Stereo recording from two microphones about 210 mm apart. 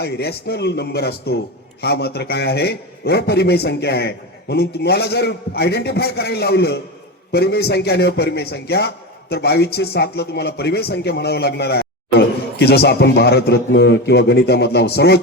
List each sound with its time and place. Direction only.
0.0 s speech: 50° left (ahead or behind)